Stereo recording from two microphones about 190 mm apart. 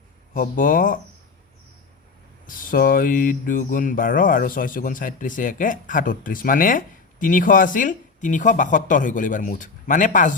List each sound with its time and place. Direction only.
0.3 s mantra: 45° left (ahead or behind)
2.5 s mantra: 45° left (ahead or behind)